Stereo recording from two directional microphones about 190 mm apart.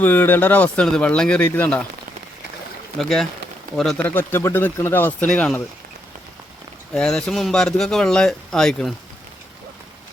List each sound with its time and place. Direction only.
0.0 s speech: 10° left (ahead or behind)
3.0 s speech: centre (ahead or behind)
6.9 s speech: 5° left (ahead or behind)